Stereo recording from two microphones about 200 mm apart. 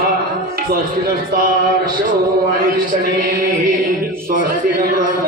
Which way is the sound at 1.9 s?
45° right (ahead or behind).